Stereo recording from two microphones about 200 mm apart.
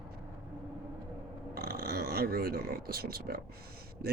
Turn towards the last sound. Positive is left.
turn(degrees=-50)  # may be behind; listen again after turning